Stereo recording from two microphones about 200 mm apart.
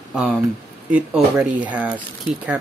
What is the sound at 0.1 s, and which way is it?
Speech, centre (ahead or behind).